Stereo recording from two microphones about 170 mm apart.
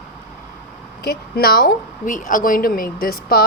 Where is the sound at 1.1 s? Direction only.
65° left (ahead or behind).